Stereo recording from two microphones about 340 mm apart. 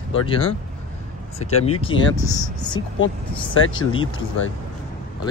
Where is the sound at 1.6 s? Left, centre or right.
Centre.